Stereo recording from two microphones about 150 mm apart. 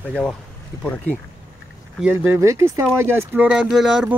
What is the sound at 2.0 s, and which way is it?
Speech, 15° right (ahead or behind).